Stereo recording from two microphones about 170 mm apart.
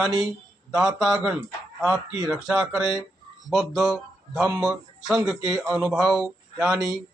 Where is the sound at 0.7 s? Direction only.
5° right (ahead or behind).